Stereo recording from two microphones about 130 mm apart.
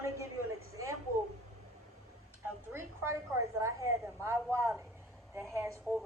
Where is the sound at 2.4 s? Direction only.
20° right (ahead or behind).